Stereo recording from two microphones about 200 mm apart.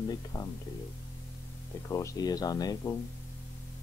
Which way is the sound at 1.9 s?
15° left (ahead or behind).